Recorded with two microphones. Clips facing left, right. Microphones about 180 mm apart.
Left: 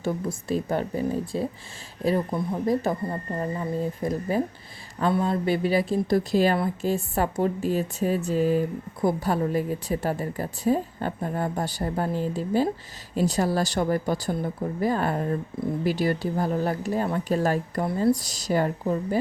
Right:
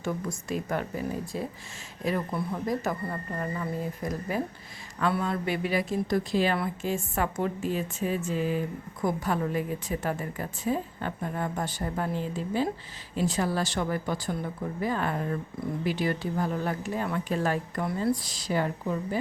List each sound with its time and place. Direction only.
0.0 s speech: 30° left (ahead or behind)
2.3 s a woman's voice: 25° left (ahead or behind); by 19.2 s 40° left (ahead or behind)